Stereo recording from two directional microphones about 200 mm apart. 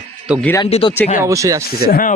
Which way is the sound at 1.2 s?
15° right (ahead or behind).